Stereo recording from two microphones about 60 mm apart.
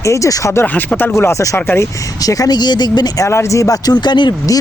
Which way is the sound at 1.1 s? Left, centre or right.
Left.